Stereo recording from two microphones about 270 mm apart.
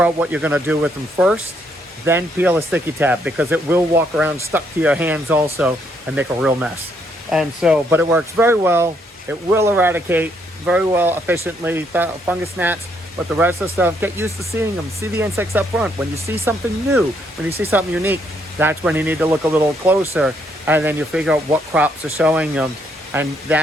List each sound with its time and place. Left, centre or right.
0.0 s speech: centre